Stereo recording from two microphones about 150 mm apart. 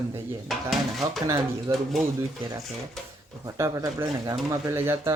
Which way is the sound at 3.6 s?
20° right (ahead or behind).